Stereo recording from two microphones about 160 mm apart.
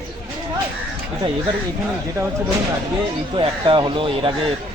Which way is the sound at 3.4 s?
30° right (ahead or behind).